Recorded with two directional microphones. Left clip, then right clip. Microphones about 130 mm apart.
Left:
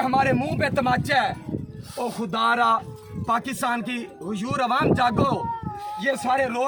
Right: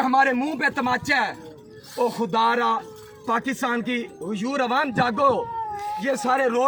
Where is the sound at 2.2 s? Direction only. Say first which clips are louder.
Left 1 dB; 20° left (ahead or behind).